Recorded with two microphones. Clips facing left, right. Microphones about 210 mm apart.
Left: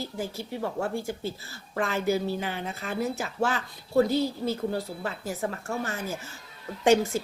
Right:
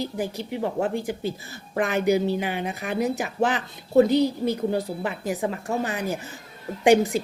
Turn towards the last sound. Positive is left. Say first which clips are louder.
# right 4 dB
turn(degrees=-15)  # may be behind; listen again after turning